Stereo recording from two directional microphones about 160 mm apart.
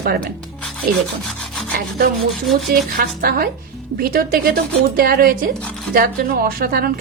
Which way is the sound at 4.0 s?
65° right (ahead or behind).